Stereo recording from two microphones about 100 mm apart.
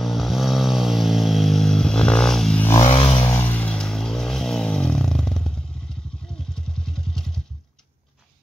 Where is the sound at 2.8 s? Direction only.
75° left (ahead or behind).